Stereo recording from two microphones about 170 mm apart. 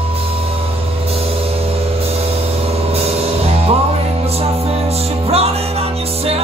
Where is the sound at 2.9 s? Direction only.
35° right (ahead or behind).